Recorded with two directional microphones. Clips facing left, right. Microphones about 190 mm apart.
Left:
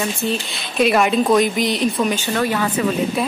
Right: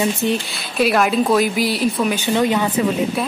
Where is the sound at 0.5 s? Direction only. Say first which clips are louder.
Left 1 dB; centre (ahead or behind).